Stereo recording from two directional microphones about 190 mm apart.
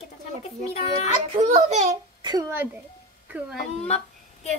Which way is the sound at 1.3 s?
35° right (ahead or behind).